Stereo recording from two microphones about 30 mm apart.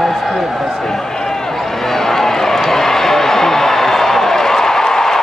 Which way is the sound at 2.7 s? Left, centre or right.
Centre.